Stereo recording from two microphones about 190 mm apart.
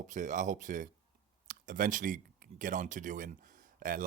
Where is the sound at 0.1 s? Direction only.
40° right (ahead or behind).